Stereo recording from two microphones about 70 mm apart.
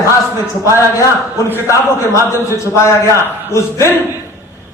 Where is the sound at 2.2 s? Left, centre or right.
Left.